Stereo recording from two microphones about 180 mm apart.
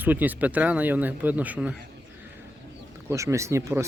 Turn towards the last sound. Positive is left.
turn(degrees=-15)  # may be behind; listen again after turning